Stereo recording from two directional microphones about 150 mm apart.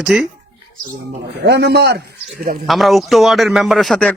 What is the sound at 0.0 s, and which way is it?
Speech, 5° right (ahead or behind).